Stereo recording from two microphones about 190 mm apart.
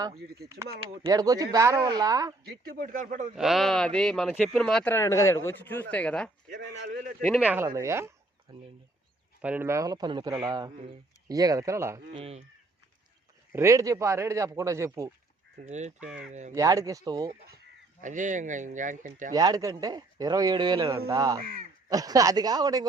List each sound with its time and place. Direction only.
1.0 s a man's voice: 20° right (ahead or behind)
2.4 s speech: 50° right (ahead or behind)
3.3 s speech: centre (ahead or behind)
6.5 s speech: 65° right (ahead or behind)
6.9 s speech: 45° right (ahead or behind)
7.2 s speech: 10° left (ahead or behind)
7.4 s speech: 10° right (ahead or behind)
9.4 s a man's voice: 10° right (ahead or behind)
12.1 s speech: 30° right (ahead or behind)
13.5 s speech: 15° right (ahead or behind)
15.6 s speech: 40° right (ahead or behind)
16.6 s speech: 15° right (ahead or behind)
18.0 s speech: 40° right (ahead or behind)
19.3 s a man's voice: 20° right (ahead or behind)